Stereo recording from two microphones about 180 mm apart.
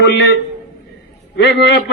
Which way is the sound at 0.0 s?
70° left (ahead or behind).